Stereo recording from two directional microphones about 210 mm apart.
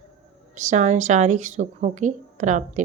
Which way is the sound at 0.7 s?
35° right (ahead or behind).